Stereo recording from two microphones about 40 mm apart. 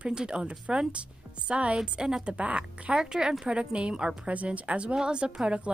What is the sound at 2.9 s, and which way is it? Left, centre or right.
A woman's voice, centre.